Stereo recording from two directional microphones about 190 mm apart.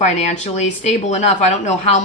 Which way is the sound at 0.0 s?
40° left (ahead or behind).